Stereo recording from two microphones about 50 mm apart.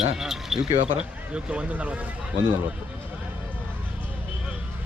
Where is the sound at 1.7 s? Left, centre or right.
Right.